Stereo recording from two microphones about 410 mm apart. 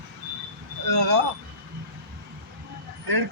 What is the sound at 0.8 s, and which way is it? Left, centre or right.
Vehicle, right.